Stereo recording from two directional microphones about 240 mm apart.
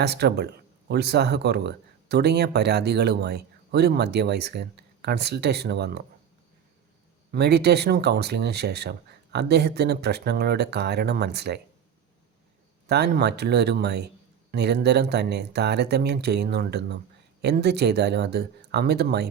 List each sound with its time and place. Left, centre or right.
0.0 s speech: right
7.3 s speech: right
12.9 s speech: right